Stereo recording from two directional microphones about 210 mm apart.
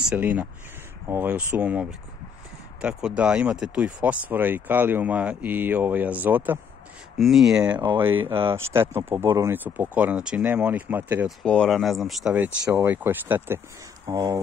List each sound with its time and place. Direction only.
0.1 s speech: 5° right (ahead or behind)
11.4 s speech: 5° left (ahead or behind); by 14.4 s 15° right (ahead or behind)